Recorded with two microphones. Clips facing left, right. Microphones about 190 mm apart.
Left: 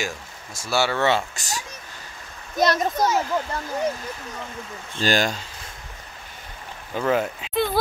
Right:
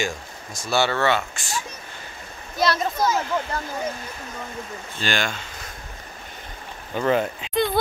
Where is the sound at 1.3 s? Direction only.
40° left (ahead or behind).